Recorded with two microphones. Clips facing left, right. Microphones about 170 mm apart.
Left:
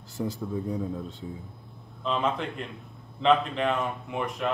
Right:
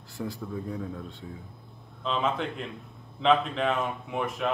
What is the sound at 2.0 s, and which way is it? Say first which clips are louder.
Speech: left 1 dB; centre (ahead or behind).